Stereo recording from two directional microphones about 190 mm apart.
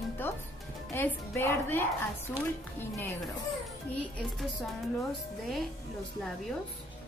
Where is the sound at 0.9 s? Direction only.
15° left (ahead or behind).